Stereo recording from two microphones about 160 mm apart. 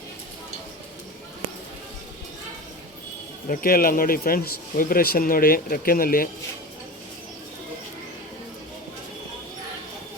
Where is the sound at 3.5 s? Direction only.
65° left (ahead or behind).